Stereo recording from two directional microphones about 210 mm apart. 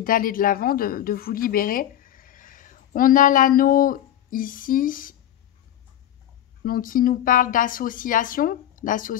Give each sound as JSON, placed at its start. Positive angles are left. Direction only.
{"t": 0.0, "sound": "speech", "side_deg": 40}
{"t": 6.6, "sound": "speech", "side_deg": 40}